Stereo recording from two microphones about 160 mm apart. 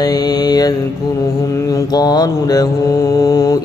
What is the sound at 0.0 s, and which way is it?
Mantra, 25° left (ahead or behind).